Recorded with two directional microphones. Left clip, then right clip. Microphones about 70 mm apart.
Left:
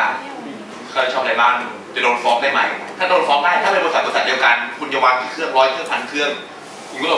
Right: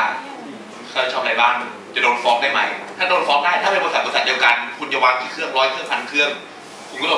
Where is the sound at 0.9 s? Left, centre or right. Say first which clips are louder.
Left 2 dB; right.